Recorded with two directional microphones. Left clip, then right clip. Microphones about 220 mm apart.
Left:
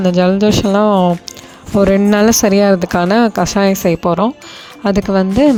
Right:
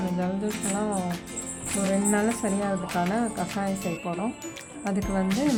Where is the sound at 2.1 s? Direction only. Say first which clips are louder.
Left 15 dB; 50° left (ahead or behind).